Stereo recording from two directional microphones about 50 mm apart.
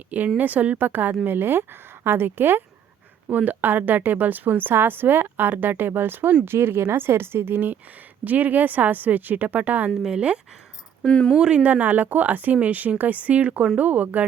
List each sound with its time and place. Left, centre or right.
0.3 s a woman's voice: right
3.3 s a woman's voice: right
10.2 s speech: right
11.0 s speech: centre
11.3 s a woman's voice: centre; by 14.3 s right